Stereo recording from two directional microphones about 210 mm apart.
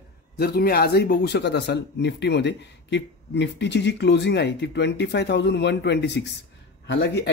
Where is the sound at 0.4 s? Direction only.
50° left (ahead or behind).